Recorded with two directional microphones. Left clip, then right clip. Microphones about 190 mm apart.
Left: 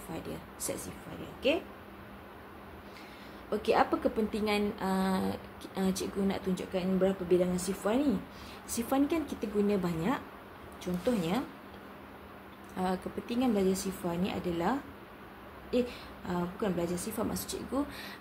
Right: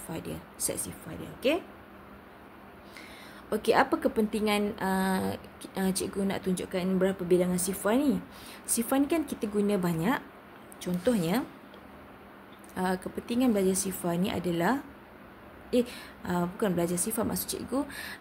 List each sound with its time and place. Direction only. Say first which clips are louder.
0.1 s speech: right 2 dB; 45° right (ahead or behind)
3.4 s speech: right 3 dB; 50° right (ahead or behind)
12.7 s speech: right 3 dB; 45° right (ahead or behind)